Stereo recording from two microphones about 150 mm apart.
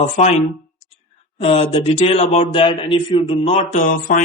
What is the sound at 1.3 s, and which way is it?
A man's voice, 40° left (ahead or behind).